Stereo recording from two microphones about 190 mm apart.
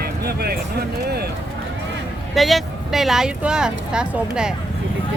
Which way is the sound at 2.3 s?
Centre (ahead or behind).